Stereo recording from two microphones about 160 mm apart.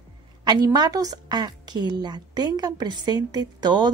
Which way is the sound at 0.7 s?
25° right (ahead or behind).